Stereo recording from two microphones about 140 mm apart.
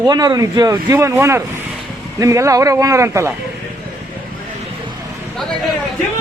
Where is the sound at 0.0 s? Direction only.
30° right (ahead or behind).